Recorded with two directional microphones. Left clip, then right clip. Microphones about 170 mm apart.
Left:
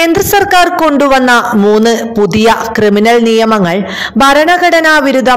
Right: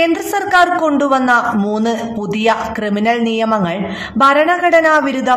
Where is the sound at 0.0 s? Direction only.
45° left (ahead or behind).